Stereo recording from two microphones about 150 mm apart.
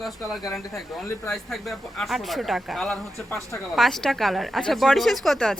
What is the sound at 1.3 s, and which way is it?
Speech, centre (ahead or behind).